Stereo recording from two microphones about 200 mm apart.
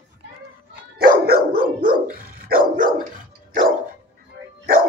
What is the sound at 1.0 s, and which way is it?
Dog, 45° right (ahead or behind).